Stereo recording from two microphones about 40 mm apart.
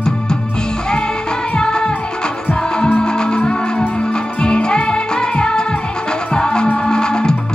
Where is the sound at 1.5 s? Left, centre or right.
Left.